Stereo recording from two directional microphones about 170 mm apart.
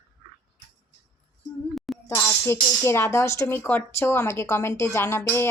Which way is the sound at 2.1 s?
15° left (ahead or behind).